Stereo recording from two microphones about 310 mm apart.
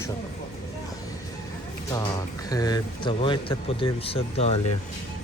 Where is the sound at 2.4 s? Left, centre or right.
Centre.